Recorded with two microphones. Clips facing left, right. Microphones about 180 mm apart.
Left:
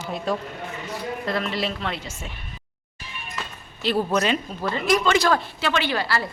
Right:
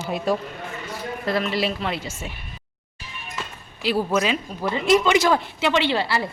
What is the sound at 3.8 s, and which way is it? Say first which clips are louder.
Speech: even; 10° right (ahead or behind).